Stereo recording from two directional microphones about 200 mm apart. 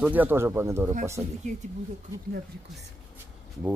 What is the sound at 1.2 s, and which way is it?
Speech, 35° right (ahead or behind).